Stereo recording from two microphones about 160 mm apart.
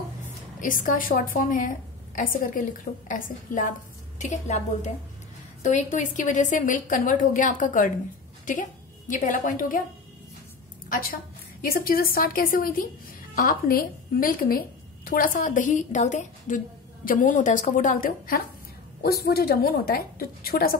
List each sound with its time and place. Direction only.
0.6 s a woman's voice: 55° left (ahead or behind)
10.9 s a woman's voice: 65° left (ahead or behind)
19.2 s a woman's voice: 70° left (ahead or behind)